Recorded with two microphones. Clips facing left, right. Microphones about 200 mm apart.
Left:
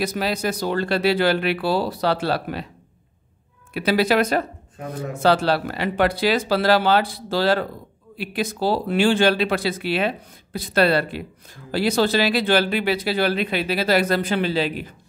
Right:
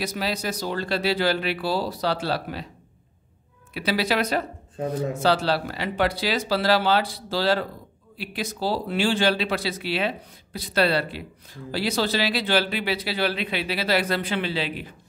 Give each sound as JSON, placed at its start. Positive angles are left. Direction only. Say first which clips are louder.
{"t": 0.0, "sound": "speech", "louder": "left 4 dB", "side_deg": 55}
{"t": 3.7, "sound": "speech", "louder": "left 5 dB", "side_deg": 50}